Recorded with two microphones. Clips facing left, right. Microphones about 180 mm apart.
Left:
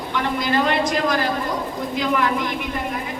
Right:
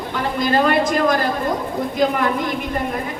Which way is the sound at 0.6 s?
50° right (ahead or behind).